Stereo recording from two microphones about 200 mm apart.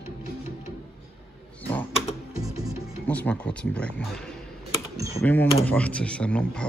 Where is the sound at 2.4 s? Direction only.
15° right (ahead or behind).